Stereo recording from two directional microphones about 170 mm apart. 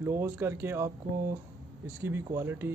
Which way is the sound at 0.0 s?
15° right (ahead or behind).